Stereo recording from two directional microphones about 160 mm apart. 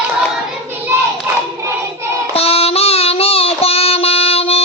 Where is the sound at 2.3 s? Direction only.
40° left (ahead or behind).